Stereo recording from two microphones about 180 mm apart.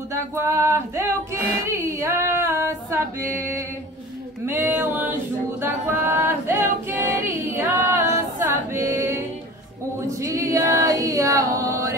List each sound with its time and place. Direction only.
0.1 s singing: 15° right (ahead or behind)
7.9 s music: 10° right (ahead or behind)
10.2 s a capella: 20° right (ahead or behind)